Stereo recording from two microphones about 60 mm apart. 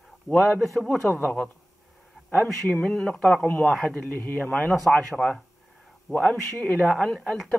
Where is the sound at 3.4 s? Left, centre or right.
Left.